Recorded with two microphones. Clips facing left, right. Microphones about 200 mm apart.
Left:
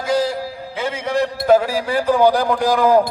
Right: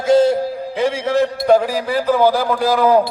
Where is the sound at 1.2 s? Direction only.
5° left (ahead or behind).